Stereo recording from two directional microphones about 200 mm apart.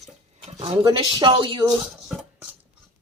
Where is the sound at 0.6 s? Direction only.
25° right (ahead or behind).